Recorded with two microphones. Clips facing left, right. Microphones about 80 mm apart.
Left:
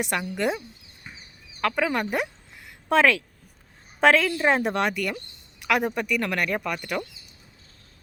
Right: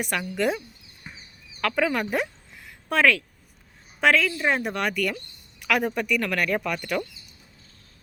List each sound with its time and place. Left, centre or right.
0.2 s speech: centre
1.6 s speech: centre
2.9 s speech: left
4.9 s speech: centre